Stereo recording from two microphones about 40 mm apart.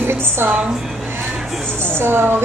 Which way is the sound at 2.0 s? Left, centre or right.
Right.